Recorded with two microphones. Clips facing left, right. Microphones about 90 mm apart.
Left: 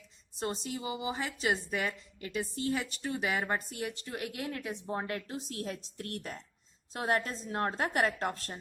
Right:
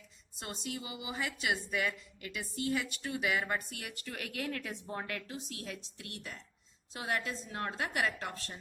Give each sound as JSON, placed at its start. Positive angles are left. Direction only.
{"t": 0.3, "sound": "a woman's voice", "side_deg": 35}